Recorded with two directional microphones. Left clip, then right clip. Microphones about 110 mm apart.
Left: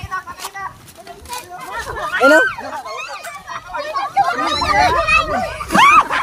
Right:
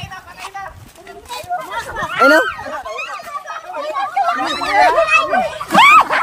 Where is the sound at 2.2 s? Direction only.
5° right (ahead or behind).